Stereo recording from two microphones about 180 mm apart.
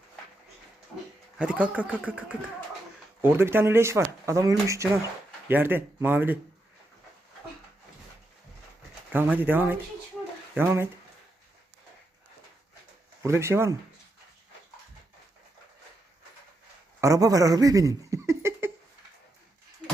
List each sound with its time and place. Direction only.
1.4 s speech: 5° right (ahead or behind)
9.1 s speech: 10° right (ahead or behind)
13.2 s speech: 15° right (ahead or behind)
17.0 s speech: 20° right (ahead or behind)